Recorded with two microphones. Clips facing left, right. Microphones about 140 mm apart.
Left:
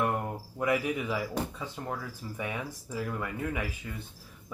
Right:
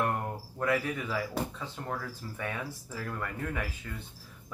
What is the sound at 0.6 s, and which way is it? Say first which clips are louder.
Speech: left 2 dB; 15° left (ahead or behind).